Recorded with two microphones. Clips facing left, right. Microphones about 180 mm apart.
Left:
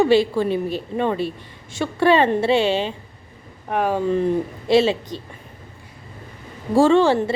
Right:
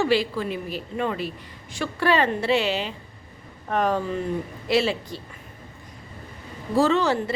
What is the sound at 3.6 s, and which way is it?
Speech, 10° left (ahead or behind).